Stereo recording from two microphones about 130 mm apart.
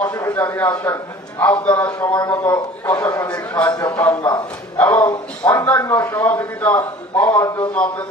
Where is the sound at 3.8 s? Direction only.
25° left (ahead or behind).